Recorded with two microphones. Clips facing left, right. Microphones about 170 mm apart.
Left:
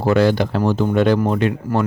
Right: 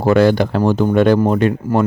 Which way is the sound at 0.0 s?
50° right (ahead or behind).